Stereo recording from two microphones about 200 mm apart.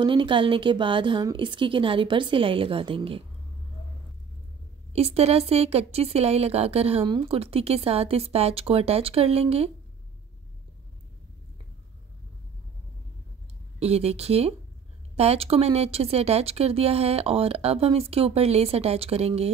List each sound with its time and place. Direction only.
0.0 s speech: 25° right (ahead or behind)
4.9 s speech: 30° right (ahead or behind)
13.7 s speech: 30° right (ahead or behind)